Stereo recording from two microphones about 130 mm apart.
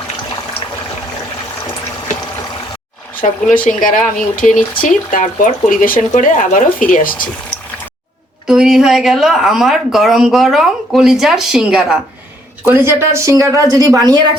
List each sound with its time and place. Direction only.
3.2 s speech: 90° left
8.4 s speech: 5° right (ahead or behind)
12.6 s speech: 15° right (ahead or behind)